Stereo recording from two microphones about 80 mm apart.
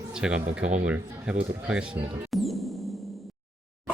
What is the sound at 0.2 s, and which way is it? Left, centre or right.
Speech, centre.